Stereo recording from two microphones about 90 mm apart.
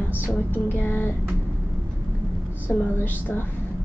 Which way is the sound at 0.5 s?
20° left (ahead or behind).